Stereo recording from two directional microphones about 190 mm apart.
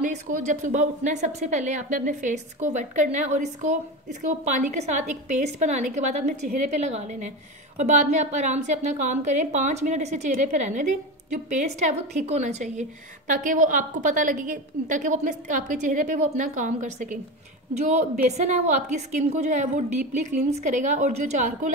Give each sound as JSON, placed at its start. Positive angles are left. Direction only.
{"t": 0.0, "sound": "a woman's voice", "side_deg": -40}